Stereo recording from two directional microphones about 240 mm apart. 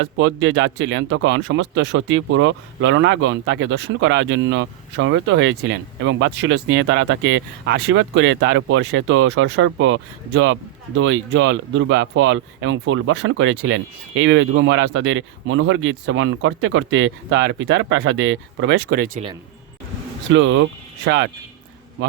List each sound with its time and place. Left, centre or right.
0.0 s speech: right
20.3 s speech: right